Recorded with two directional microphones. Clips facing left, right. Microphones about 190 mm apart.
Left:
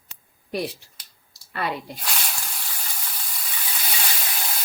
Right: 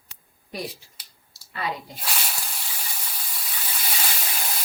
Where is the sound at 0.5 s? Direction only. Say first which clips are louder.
Left 6 dB; 65° left (ahead or behind).